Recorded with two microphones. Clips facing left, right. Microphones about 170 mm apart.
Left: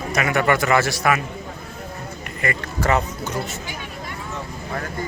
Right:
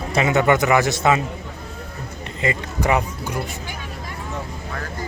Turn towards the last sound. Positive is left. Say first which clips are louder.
# even
turn(degrees=-10)  # may be behind; listen again after turning